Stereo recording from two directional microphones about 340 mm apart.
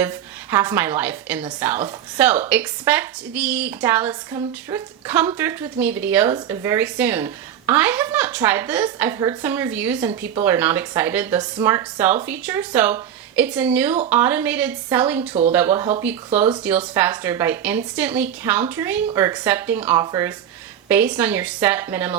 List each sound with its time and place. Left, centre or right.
0.5 s a woman's voice: centre
15.2 s speech: centre
15.5 s a woman's voice: centre